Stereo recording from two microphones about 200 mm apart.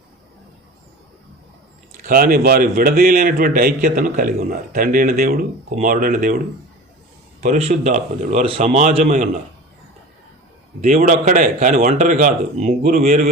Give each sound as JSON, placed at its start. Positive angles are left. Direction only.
{"t": 2.0, "sound": "a man's voice", "side_deg": -45}
{"t": 7.4, "sound": "speech", "side_deg": -35}
{"t": 10.8, "sound": "speech", "side_deg": -35}